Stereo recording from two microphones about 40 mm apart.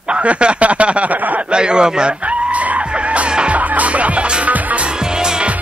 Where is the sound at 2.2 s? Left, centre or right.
Right.